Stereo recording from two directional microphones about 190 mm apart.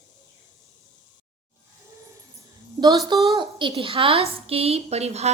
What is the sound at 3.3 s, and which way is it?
A woman's voice, 25° right (ahead or behind).